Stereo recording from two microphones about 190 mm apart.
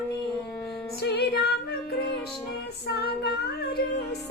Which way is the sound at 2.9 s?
55° left (ahead or behind).